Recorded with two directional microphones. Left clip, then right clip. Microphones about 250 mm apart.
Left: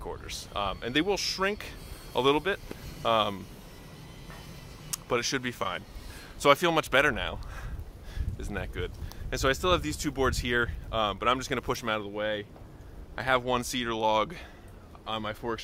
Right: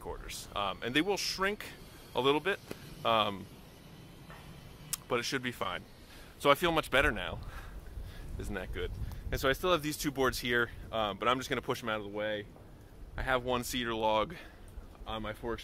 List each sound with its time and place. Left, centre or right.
0.0 s speech: centre
4.9 s speech: centre
10.9 s speech: centre